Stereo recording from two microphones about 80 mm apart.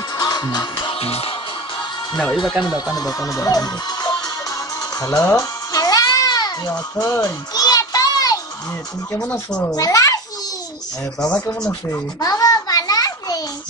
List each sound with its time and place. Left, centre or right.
0.2 s music: left
2.1 s speech: centre
2.6 s speech: left
5.0 s music: left
7.0 s a sound: left
9.2 s speech: centre
9.7 s speech: left
12.2 s a sound: left